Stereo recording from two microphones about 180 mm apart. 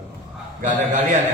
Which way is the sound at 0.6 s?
45° right (ahead or behind).